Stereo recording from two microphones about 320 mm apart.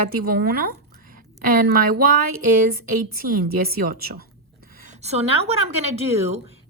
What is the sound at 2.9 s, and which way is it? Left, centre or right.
Speech, right.